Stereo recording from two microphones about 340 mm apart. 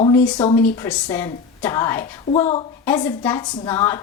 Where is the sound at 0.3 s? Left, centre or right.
Centre.